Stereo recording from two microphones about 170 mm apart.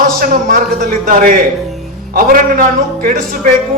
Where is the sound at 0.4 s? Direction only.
55° right (ahead or behind).